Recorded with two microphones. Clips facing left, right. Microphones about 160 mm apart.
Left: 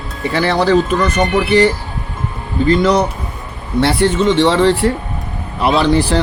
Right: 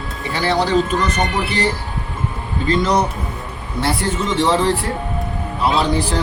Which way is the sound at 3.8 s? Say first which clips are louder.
Left 7 dB; 75° left (ahead or behind).